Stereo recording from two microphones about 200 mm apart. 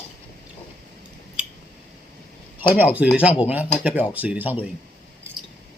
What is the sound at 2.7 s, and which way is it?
Speech, 10° right (ahead or behind).